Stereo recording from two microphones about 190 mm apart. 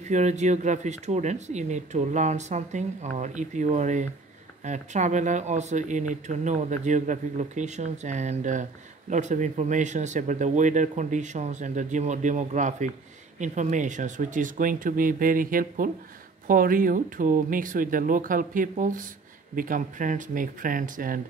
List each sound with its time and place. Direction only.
0.1 s speech: 40° right (ahead or behind)